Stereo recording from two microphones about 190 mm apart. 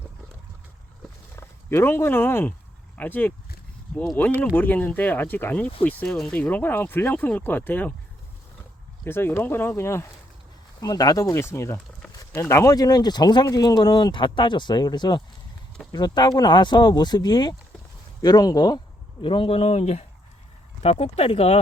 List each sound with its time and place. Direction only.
1.4 s speech: 10° left (ahead or behind)
9.0 s speech: 10° left (ahead or behind); by 21.6 s 35° left (ahead or behind)